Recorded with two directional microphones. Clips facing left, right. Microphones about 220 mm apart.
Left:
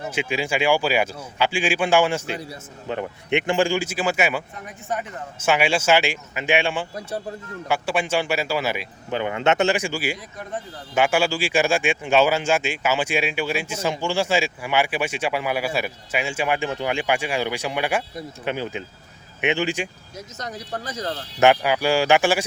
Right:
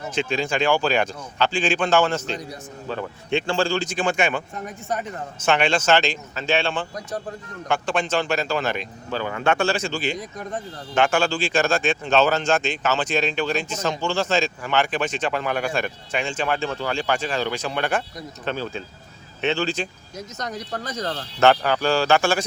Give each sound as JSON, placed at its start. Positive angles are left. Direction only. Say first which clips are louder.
{"t": 0.1, "sound": "speech", "louder": "right 1 dB", "side_deg": 10}
{"t": 2.9, "sound": "speech", "louder": "left 1 dB", "side_deg": 20}
{"t": 9.1, "sound": "speech", "louder": "left 2 dB", "side_deg": 20}
{"t": 21.3, "sound": "speech", "louder": "left 1 dB", "side_deg": 10}